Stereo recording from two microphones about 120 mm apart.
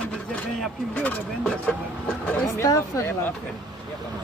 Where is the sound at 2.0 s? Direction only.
10° left (ahead or behind).